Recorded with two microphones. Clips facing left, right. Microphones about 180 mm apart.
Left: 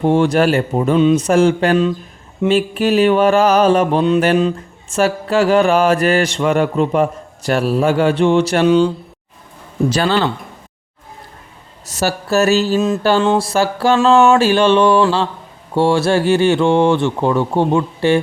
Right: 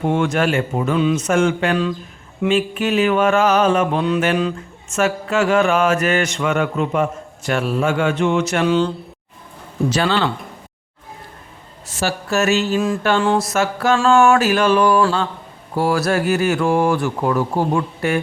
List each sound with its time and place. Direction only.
0.0 s mantra: 30° left (ahead or behind)
8.6 s speech: 15° left (ahead or behind)
9.9 s mantra: 40° left (ahead or behind)
11.9 s mantra: 40° left (ahead or behind)
13.2 s speech: 25° left (ahead or behind)